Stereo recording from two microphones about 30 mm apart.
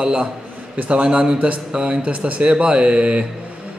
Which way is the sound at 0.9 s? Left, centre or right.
Right.